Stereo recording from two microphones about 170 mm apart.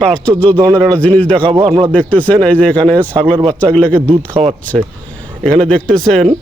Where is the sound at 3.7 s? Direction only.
10° left (ahead or behind).